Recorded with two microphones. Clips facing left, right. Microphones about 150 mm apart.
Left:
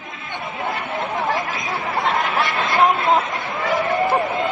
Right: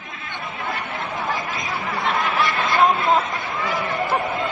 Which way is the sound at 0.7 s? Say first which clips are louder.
Left 4 dB; 20° left (ahead or behind).